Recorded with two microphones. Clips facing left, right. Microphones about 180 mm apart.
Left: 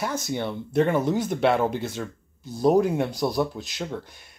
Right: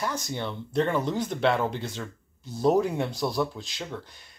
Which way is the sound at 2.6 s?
15° left (ahead or behind).